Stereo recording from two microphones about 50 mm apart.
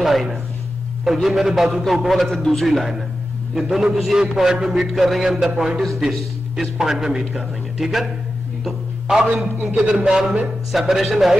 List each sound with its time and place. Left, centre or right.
0.0 s a man's voice: centre
2.2 s a man's voice: centre
9.3 s a man's voice: right
9.8 s a man's voice: centre
10.4 s a man's voice: centre